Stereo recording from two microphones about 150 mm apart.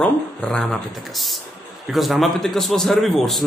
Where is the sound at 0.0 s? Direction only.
5° left (ahead or behind).